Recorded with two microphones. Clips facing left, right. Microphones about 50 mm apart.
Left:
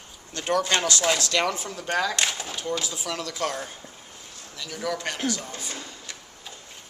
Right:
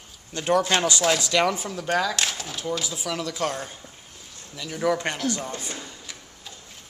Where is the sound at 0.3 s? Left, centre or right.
Centre.